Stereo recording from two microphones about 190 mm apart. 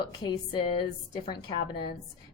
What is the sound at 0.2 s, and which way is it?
A woman's voice, 20° left (ahead or behind).